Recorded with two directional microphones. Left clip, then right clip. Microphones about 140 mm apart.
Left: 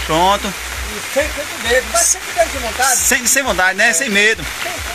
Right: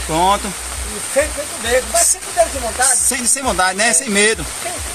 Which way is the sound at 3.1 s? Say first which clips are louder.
Left 4 dB; 5° right (ahead or behind).